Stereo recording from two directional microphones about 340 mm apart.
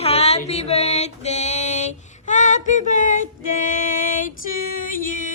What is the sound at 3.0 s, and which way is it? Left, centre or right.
Female singing, left.